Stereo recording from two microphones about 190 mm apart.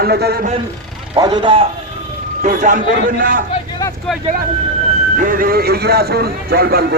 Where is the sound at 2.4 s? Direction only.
45° right (ahead or behind).